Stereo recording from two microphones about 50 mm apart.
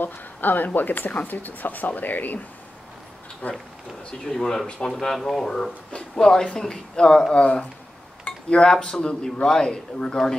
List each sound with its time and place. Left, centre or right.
0.0 s speech: left
3.4 s speech: left
4.3 s speech: centre
4.6 s speech: centre
4.9 s speech: centre